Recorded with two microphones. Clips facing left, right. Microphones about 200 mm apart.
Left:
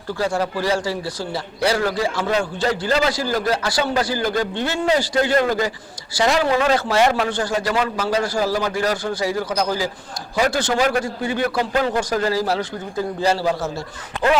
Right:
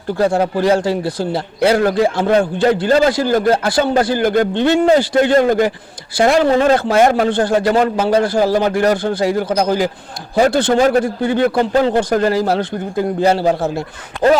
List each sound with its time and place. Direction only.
0.2 s a man's voice: 55° right (ahead or behind)
11.7 s speech: 25° right (ahead or behind)
11.9 s a man's voice: 55° right (ahead or behind)
14.2 s speech: 40° right (ahead or behind)